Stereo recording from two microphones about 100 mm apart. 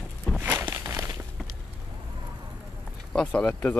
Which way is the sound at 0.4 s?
20° right (ahead or behind).